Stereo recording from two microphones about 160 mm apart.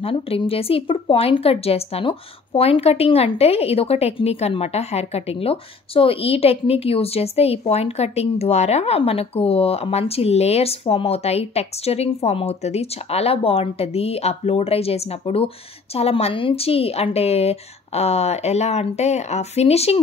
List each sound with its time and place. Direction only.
0.0 s a woman's voice: 35° left (ahead or behind)